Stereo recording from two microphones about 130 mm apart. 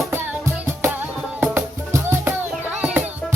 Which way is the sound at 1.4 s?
15° right (ahead or behind).